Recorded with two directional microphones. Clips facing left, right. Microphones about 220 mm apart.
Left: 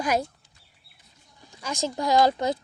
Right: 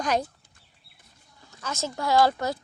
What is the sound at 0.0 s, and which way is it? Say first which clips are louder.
Speech: left 1 dB; 10° left (ahead or behind).